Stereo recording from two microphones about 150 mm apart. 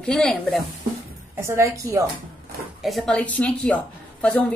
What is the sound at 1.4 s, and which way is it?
Speech, 20° right (ahead or behind).